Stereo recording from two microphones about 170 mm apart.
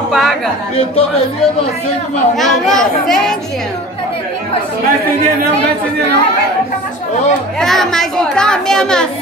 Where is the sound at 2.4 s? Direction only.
Centre (ahead or behind).